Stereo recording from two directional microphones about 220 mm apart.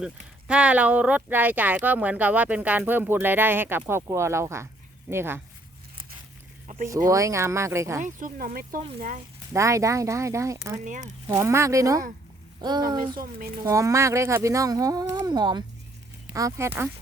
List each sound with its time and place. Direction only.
0.0 s speech: 5° right (ahead or behind)
6.7 s a sound: 35° right (ahead or behind)
7.1 s speech: 15° right (ahead or behind)
8.0 s speech: 35° right (ahead or behind)
9.5 s speech: 15° right (ahead or behind)
10.8 s speech: 35° right (ahead or behind)
11.3 s a woman's voice: 10° right (ahead or behind)